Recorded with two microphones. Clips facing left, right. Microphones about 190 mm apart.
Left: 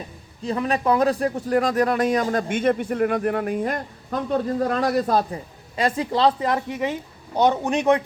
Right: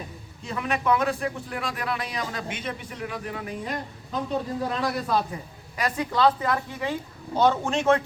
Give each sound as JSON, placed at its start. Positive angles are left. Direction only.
{"t": 0.4, "sound": "speech", "side_deg": 35}
{"t": 5.7, "sound": "speech", "side_deg": 30}